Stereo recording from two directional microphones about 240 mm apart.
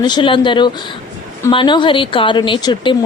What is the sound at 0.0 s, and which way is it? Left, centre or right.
Speech, centre.